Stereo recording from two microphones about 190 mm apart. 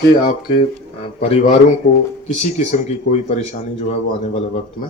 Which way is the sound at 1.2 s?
35° left (ahead or behind).